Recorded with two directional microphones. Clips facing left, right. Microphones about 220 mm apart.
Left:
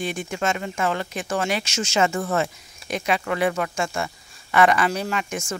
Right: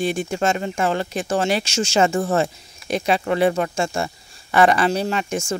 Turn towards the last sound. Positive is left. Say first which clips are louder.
# right 4 dB
turn(degrees=-30)  # may be behind; listen again after turning